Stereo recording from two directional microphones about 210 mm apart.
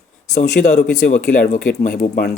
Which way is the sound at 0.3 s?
35° left (ahead or behind).